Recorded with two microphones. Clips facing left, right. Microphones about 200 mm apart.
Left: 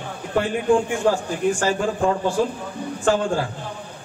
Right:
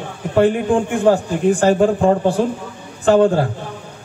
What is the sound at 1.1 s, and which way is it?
Speech, 60° right (ahead or behind).